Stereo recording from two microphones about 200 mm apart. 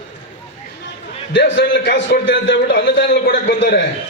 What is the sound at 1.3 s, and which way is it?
A man's voice, 65° left (ahead or behind).